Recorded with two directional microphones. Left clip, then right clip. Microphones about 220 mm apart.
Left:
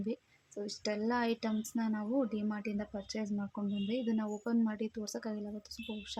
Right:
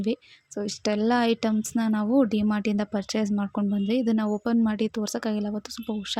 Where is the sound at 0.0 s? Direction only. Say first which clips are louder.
Right 11 dB; 35° right (ahead or behind).